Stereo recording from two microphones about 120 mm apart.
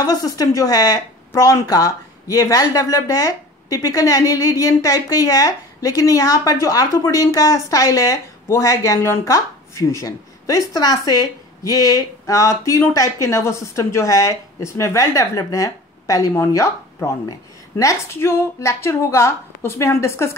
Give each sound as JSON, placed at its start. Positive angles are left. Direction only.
{"t": 0.0, "sound": "speech", "side_deg": 30}